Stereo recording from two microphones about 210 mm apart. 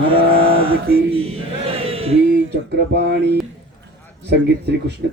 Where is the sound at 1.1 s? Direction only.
25° right (ahead or behind).